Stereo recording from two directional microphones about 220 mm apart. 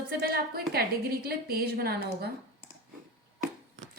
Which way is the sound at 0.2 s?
45° right (ahead or behind).